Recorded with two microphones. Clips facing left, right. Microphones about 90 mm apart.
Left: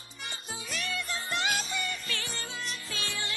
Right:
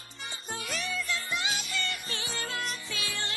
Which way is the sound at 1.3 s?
50° left (ahead or behind).